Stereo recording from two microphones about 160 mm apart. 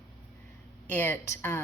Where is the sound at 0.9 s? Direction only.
10° left (ahead or behind).